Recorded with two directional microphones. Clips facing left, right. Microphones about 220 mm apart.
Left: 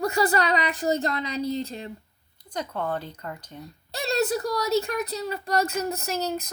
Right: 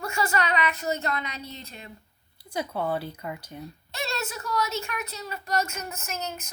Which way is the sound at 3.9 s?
35° left (ahead or behind).